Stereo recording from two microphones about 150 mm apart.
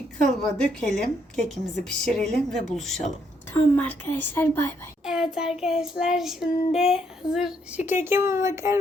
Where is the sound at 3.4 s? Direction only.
10° left (ahead or behind).